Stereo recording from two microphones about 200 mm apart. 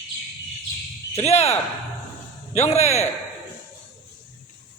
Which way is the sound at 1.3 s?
30° left (ahead or behind).